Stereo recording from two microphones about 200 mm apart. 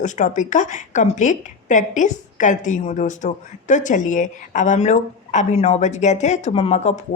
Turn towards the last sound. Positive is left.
turn(degrees=30)  # may be behind; listen again after turning